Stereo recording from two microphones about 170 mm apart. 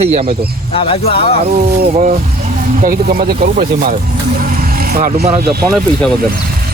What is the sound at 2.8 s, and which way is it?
Speech, 60° right (ahead or behind).